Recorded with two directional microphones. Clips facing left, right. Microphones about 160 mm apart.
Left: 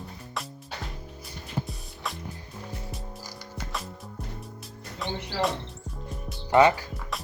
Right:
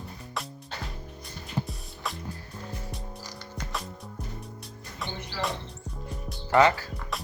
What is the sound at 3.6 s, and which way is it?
Music, centre (ahead or behind).